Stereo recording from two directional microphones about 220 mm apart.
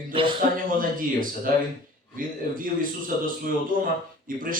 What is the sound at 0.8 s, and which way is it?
A man's voice, 40° right (ahead or behind).